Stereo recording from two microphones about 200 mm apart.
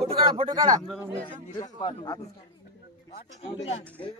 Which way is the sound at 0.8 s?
Centre (ahead or behind).